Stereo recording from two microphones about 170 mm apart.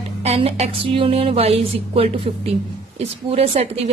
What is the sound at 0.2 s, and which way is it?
A woman's voice, 35° right (ahead or behind).